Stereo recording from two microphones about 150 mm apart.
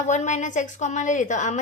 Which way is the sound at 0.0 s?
55° left (ahead or behind).